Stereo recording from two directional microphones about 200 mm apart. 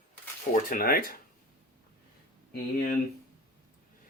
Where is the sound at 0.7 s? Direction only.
45° left (ahead or behind).